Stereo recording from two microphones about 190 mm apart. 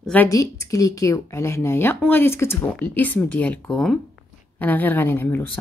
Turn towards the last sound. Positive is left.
turn(degrees=10)  # may be behind; listen again after turning